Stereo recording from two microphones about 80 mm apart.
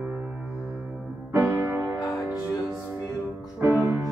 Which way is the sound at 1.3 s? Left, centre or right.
Right.